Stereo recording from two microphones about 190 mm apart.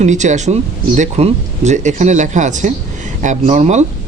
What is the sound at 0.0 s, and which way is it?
Speech, 40° right (ahead or behind).